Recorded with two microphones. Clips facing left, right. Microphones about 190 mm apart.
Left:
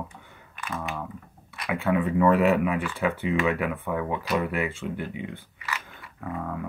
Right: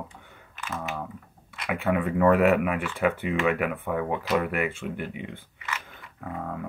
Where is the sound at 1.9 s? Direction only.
50° right (ahead or behind).